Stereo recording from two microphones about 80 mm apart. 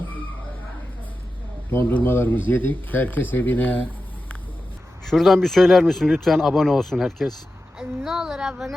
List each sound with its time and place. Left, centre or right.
1.7 s speech: left
5.0 s a woman's voice: centre